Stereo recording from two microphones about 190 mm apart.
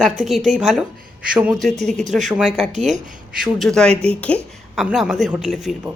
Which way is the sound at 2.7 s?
35° right (ahead or behind).